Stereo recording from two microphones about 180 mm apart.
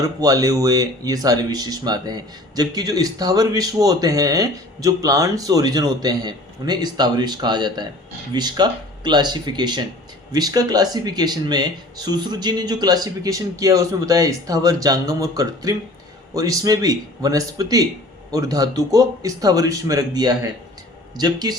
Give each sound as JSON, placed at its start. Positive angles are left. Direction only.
{"t": 0.0, "sound": "speech", "side_deg": -20}